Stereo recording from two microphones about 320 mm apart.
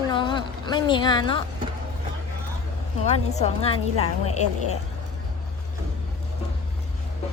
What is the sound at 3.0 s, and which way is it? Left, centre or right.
A woman's voice, centre.